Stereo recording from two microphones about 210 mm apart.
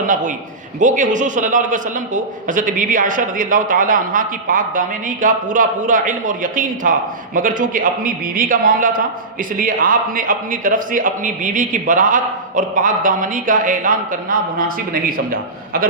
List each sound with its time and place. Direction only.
0.1 s a man's voice: 40° right (ahead or behind)